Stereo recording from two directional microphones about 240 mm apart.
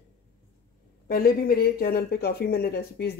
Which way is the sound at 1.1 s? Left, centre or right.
Left.